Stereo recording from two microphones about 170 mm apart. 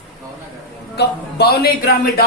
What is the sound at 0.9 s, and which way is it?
Speech, 75° left (ahead or behind).